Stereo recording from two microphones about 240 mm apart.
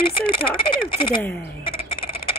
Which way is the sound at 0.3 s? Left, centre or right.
Left.